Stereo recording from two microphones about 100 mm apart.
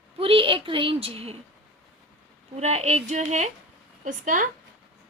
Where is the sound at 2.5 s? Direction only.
90° right.